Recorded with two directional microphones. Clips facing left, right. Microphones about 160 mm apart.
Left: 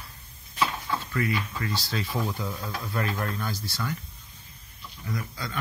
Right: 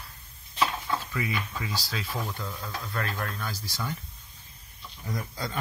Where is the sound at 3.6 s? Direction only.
15° right (ahead or behind).